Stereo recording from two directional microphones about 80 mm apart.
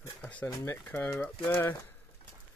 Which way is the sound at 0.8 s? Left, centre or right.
Left.